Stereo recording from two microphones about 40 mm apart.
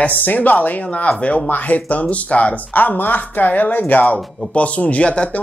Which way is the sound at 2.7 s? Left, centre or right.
Left.